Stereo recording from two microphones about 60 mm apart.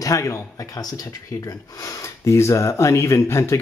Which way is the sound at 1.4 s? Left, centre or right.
Left.